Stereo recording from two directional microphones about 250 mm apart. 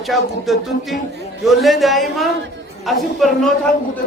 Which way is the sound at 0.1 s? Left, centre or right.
Centre.